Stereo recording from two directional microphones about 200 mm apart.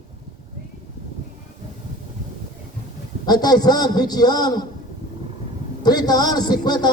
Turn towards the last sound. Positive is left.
turn(degrees=20)  # may be behind; listen again after turning